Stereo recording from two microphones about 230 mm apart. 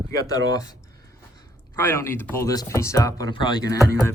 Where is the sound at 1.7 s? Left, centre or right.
Centre.